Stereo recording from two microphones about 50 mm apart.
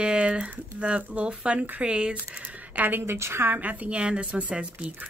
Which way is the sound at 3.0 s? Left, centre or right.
Right.